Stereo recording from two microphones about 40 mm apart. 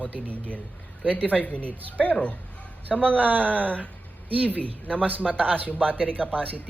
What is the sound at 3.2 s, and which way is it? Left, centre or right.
Speech, right.